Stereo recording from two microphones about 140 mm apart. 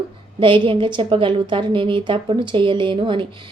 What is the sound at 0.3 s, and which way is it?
A woman's voice, 35° right (ahead or behind).